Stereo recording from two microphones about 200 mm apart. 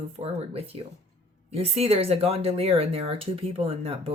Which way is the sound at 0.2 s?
30° right (ahead or behind).